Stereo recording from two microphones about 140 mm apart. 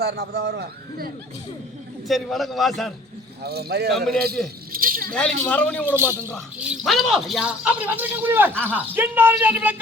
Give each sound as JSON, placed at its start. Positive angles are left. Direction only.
{"t": 0.0, "sound": "a man's voice", "side_deg": -90}
{"t": 2.0, "sound": "a man's voice", "side_deg": 0}
{"t": 3.9, "sound": "a man's voice", "side_deg": 0}
{"t": 4.7, "sound": "keys jangling", "side_deg": -90}
{"t": 5.4, "sound": "a man's voice", "side_deg": 10}
{"t": 5.8, "sound": "speech", "side_deg": -15}
{"t": 6.6, "sound": "speech", "side_deg": -5}